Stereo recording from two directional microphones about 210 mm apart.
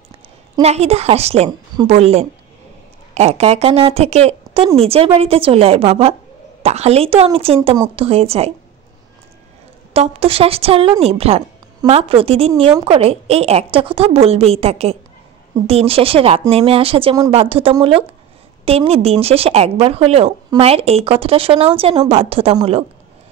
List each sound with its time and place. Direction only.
0.6 s a woman's voice: 30° right (ahead or behind)
9.9 s speech: 25° right (ahead or behind)